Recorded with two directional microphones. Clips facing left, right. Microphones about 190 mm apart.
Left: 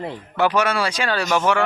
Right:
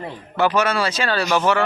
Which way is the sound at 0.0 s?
10° left (ahead or behind).